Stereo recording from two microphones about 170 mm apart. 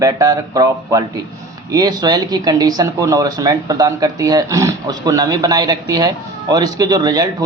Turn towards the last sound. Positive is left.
turn(degrees=-20)  # may be behind; listen again after turning